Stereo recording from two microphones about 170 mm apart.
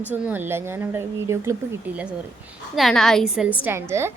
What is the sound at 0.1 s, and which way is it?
Speech, 10° right (ahead or behind).